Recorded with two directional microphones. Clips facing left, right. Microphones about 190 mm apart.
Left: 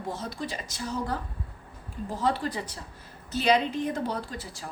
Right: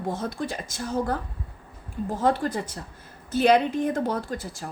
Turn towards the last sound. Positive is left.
turn(degrees=-45)  # may be behind; listen again after turning